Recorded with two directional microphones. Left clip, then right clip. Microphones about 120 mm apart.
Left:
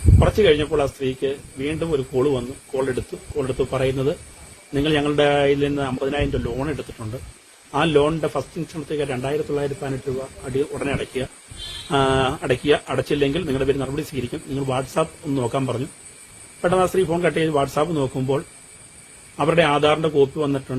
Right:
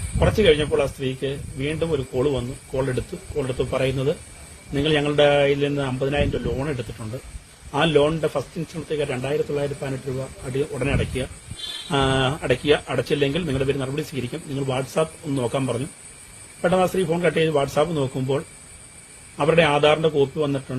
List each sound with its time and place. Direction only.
0.3 s a man's voice: 40° left (ahead or behind)